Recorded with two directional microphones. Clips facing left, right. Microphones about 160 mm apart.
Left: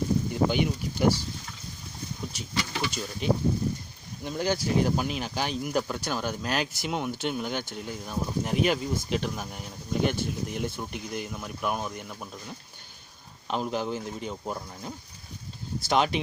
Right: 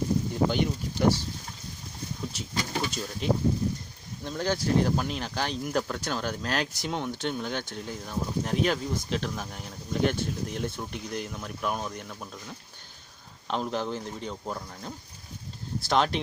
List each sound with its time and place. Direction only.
0.3 s speech: 5° left (ahead or behind)
2.5 s speech: 40° right (ahead or behind)
2.9 s speech: centre (ahead or behind)